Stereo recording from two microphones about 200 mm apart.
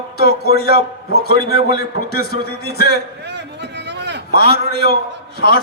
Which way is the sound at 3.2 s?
60° right (ahead or behind).